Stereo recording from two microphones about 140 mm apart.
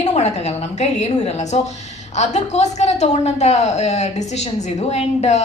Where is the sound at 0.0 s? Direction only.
50° left (ahead or behind).